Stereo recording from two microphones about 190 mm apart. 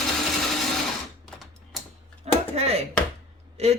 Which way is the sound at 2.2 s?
35° right (ahead or behind).